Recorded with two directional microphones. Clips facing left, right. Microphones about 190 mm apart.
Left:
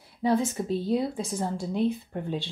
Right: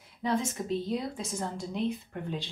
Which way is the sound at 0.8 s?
30° left (ahead or behind).